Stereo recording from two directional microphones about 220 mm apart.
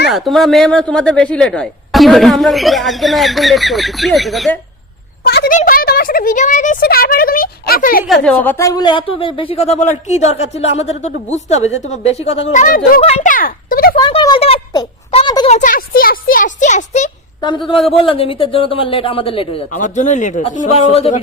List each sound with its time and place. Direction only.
0.1 s speech: centre (ahead or behind)
5.2 s speech: 45° left (ahead or behind)
8.0 s speech: 5° left (ahead or behind); by 13.9 s 40° left (ahead or behind)
13.9 s speech: 20° left (ahead or behind)
15.4 s speech: 35° left (ahead or behind)
17.4 s speech: 20° left (ahead or behind)